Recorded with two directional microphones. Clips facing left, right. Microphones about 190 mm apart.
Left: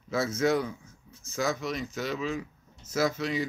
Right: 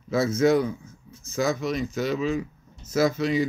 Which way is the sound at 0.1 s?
20° right (ahead or behind).